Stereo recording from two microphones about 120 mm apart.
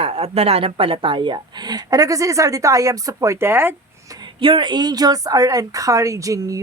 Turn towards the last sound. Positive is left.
turn(degrees=-30)  # may be behind; listen again after turning